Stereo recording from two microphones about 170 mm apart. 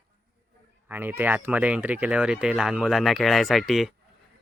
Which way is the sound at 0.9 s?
10° right (ahead or behind).